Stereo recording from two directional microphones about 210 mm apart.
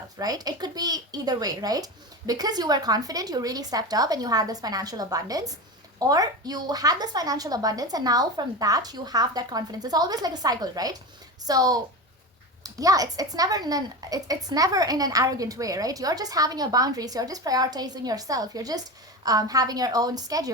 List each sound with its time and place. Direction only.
0.2 s a woman's voice: 20° right (ahead or behind)